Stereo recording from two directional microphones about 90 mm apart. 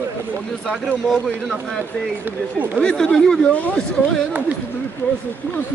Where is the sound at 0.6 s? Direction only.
Centre (ahead or behind).